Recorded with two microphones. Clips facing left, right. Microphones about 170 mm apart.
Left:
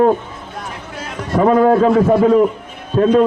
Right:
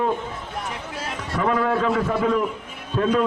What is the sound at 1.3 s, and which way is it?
Speech, 40° left (ahead or behind).